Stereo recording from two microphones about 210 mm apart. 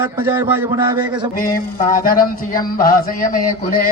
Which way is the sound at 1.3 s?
40° left (ahead or behind).